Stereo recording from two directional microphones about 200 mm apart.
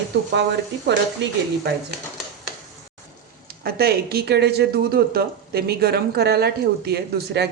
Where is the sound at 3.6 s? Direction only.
50° right (ahead or behind).